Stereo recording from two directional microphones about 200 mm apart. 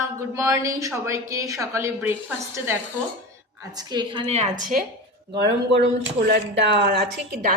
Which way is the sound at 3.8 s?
25° right (ahead or behind).